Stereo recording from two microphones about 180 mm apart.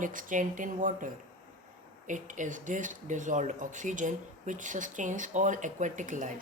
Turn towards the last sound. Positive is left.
turn(degrees=-45)  # may be behind; listen again after turning